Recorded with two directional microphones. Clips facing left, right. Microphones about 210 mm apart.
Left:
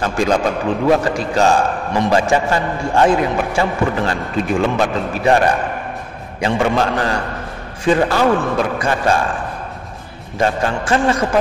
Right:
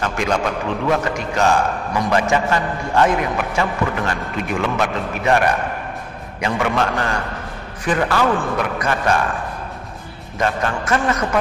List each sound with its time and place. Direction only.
0.0 s a man's voice: 30° left (ahead or behind)
10.3 s a man's voice: 30° left (ahead or behind)